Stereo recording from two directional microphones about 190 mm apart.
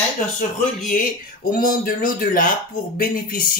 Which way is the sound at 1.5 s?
45° left (ahead or behind).